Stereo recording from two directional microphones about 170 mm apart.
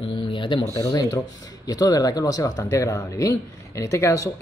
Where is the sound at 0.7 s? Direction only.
20° left (ahead or behind).